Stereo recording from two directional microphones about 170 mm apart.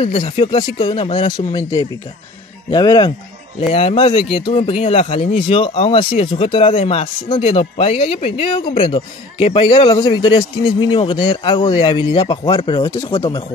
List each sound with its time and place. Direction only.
0.0 s speech: 30° left (ahead or behind)